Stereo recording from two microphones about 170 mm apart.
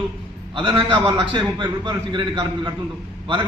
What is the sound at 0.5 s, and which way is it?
A man's voice, 30° right (ahead or behind).